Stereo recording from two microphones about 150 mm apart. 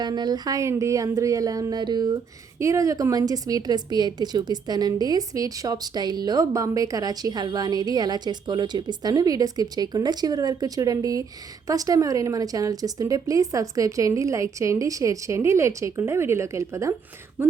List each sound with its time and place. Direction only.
0.0 s a woman's voice: 30° right (ahead or behind)